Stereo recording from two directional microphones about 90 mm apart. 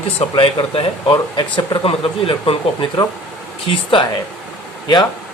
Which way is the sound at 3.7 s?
80° left.